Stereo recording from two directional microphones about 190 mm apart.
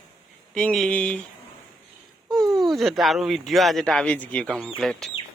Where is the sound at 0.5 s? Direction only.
5° left (ahead or behind).